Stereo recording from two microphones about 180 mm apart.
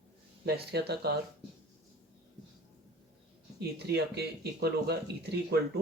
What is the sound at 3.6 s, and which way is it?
Speech, 65° right (ahead or behind).